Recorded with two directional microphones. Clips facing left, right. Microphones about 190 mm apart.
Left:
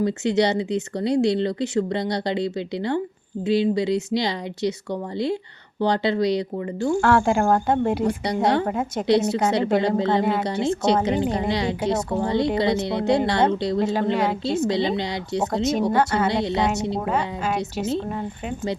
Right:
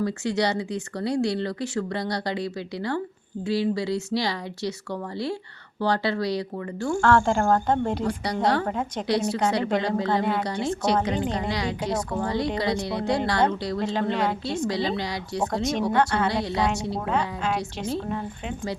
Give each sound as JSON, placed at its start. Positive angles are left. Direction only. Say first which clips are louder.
{"t": 0.0, "sound": "speech", "louder": "left 4 dB", "side_deg": 20}
{"t": 7.0, "sound": "speech", "louder": "even", "side_deg": 10}
{"t": 8.0, "sound": "speech", "louder": "left 4 dB", "side_deg": 25}
{"t": 8.6, "sound": "speech", "louder": "left 3 dB", "side_deg": 5}
{"t": 9.0, "sound": "speech", "louder": "left 5 dB", "side_deg": 25}
{"t": 13.9, "sound": "speech", "louder": "left 3 dB", "side_deg": 10}
{"t": 14.4, "sound": "speech", "louder": "left 4 dB", "side_deg": 25}
{"t": 15.9, "sound": "a woman's voice", "louder": "left 2 dB", "side_deg": 5}
{"t": 16.3, "sound": "speech", "louder": "left 3 dB", "side_deg": 20}
{"t": 17.1, "sound": "a woman's voice", "louder": "left 2 dB", "side_deg": 5}